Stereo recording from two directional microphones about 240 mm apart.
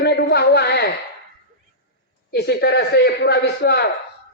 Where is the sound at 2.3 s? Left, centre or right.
Left.